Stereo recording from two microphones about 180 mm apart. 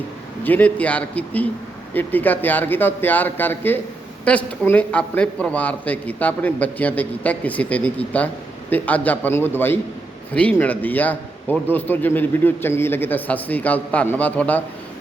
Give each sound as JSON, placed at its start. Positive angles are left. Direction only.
{"t": 0.4, "sound": "a man's voice", "side_deg": 10}